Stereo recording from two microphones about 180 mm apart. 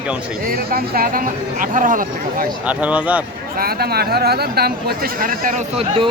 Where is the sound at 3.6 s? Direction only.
60° right (ahead or behind).